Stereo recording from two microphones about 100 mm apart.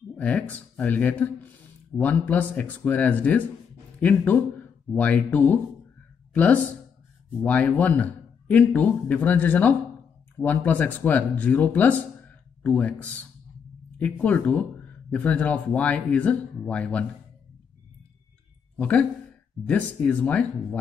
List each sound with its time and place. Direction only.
0.2 s speech: 15° left (ahead or behind)
18.8 s speech: 15° left (ahead or behind)